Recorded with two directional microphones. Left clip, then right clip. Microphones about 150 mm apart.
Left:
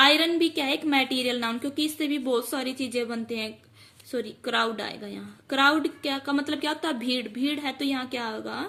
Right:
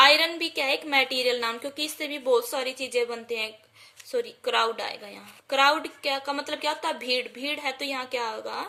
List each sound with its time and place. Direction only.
0.0 s a woman's voice: 20° right (ahead or behind)